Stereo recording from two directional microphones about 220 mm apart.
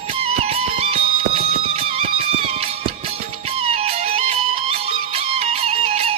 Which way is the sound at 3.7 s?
30° right (ahead or behind).